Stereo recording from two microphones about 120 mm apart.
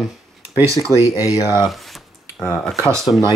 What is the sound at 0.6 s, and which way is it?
Speech, 25° right (ahead or behind).